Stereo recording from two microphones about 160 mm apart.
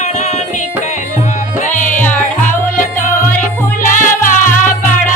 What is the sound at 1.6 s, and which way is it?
Music, 50° left (ahead or behind).